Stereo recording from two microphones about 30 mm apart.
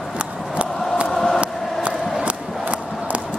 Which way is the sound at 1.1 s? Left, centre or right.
Centre.